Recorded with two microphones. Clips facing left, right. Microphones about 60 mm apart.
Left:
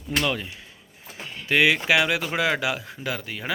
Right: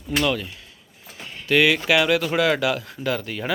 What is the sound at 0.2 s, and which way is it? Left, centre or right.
Speech, centre.